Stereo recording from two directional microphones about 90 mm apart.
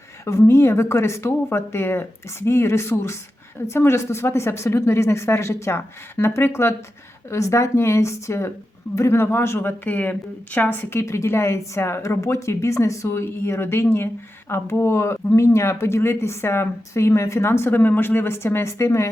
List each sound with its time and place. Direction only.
0.3 s a woman's voice: 30° left (ahead or behind)